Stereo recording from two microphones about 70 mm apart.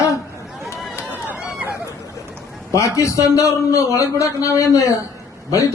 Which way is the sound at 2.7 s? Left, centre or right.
Left.